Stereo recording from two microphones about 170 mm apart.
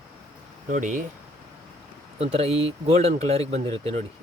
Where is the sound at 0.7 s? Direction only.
50° right (ahead or behind).